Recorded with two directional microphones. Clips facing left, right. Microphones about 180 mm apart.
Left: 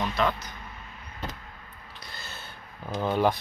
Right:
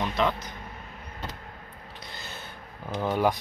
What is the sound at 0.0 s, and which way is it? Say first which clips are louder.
Speech: even; 20° right (ahead or behind).